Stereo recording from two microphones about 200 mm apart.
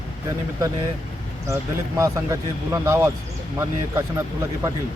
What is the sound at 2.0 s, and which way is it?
Speech, 15° right (ahead or behind).